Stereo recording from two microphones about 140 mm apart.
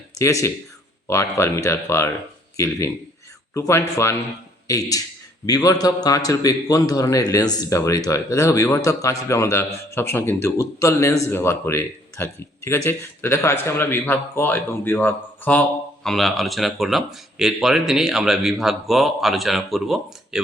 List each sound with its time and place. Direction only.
0.2 s a man's voice: 20° left (ahead or behind)
16.0 s speech: centre (ahead or behind)